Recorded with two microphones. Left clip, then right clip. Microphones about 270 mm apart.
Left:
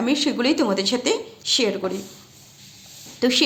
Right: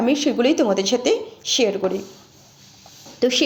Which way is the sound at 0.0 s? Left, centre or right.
Centre.